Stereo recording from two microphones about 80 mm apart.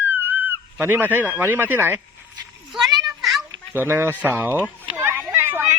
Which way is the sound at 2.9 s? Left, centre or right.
Right.